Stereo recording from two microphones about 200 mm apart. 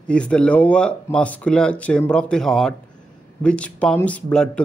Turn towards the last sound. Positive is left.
turn(degrees=5)  # may be behind; listen again after turning